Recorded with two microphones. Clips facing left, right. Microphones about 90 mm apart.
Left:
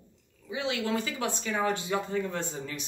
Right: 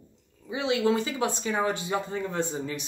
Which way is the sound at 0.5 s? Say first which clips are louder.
Right 5 dB; 25° right (ahead or behind).